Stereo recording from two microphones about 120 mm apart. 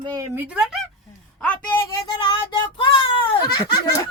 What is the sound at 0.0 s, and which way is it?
Speech, 35° right (ahead or behind).